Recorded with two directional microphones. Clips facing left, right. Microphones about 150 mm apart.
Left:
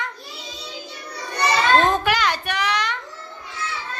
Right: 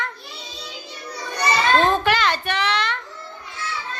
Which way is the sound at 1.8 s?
15° left (ahead or behind).